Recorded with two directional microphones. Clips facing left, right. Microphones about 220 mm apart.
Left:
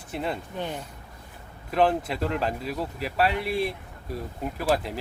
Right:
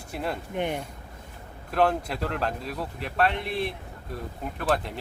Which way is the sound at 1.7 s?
Centre (ahead or behind).